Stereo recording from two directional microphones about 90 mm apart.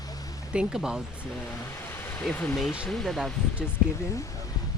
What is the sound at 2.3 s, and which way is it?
Speech, centre (ahead or behind).